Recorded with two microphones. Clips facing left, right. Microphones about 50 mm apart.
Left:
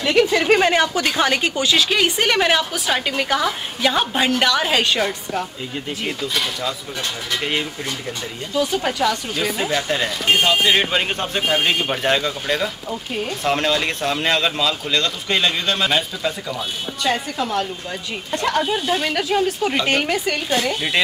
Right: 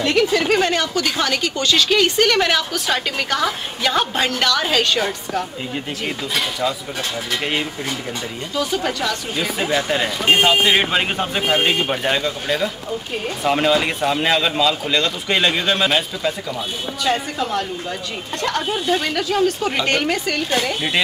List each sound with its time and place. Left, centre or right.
0.0 s a woman's voice: centre
1.6 s a woman's voice: centre
8.5 s a woman's voice: centre
9.4 s a woman's voice: centre
19.1 s a woman's voice: centre